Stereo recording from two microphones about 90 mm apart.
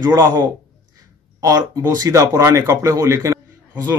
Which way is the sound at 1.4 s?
45° right (ahead or behind).